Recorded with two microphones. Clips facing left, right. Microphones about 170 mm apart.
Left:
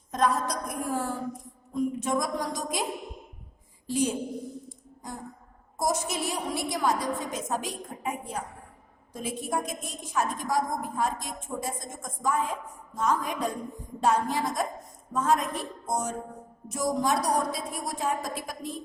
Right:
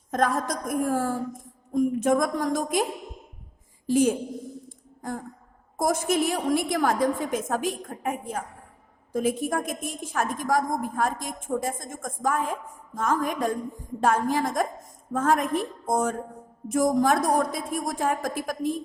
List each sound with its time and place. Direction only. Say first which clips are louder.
0.1 s a woman's voice: right 2 dB; 50° right (ahead or behind)
3.8 s a woman's voice: right 6 dB; 50° right (ahead or behind)
5.7 s a woman's voice: right 5 dB; 55° right (ahead or behind)